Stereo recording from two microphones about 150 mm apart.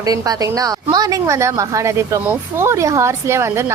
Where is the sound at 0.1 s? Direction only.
25° right (ahead or behind).